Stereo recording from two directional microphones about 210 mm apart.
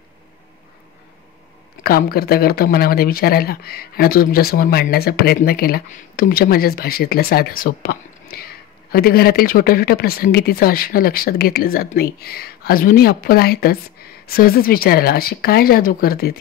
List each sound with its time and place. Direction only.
1.8 s speech: 45° left (ahead or behind)